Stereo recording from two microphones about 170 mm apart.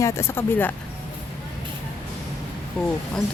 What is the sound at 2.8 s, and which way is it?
Speech, 5° left (ahead or behind).